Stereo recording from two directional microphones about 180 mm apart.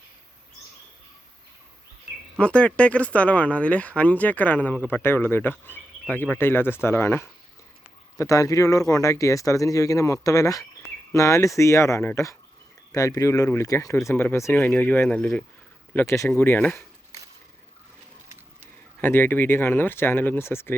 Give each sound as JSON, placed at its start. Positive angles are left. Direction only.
{"t": 2.4, "sound": "speech", "side_deg": 5}
{"t": 18.9, "sound": "speech", "side_deg": 10}